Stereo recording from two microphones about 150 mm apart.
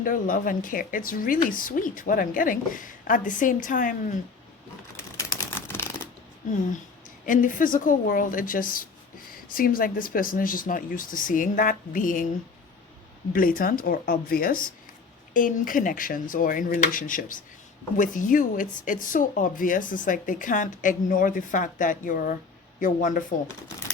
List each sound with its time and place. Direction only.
0.0 s a woman's voice: 65° left (ahead or behind)
4.9 s a sound: 20° left (ahead or behind)
7.3 s speech: 65° left (ahead or behind)
13.3 s a woman's voice: 70° left (ahead or behind)